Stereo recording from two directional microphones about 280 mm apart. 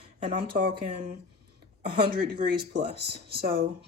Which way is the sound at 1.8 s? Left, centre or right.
Right.